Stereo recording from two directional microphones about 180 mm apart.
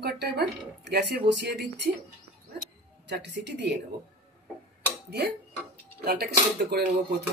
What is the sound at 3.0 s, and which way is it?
Speech, 70° right (ahead or behind).